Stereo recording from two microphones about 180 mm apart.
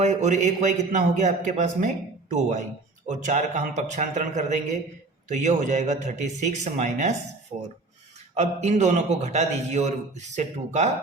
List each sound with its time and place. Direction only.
0.0 s a man's voice: 40° right (ahead or behind)